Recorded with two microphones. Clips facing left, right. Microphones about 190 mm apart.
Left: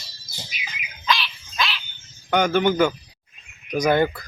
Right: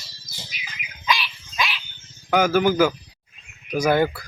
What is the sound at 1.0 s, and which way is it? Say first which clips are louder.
Dog: even; 10° right (ahead or behind).